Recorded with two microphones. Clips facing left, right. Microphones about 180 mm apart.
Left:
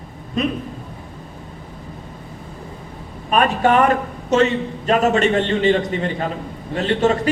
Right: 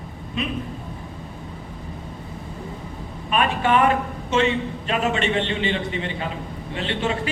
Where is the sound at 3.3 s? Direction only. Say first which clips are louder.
Left 4 dB; 40° left (ahead or behind).